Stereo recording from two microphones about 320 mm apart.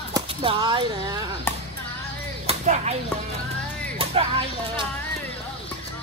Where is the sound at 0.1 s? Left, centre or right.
Centre.